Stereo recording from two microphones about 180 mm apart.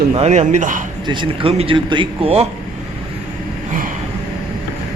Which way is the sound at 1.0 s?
30° right (ahead or behind).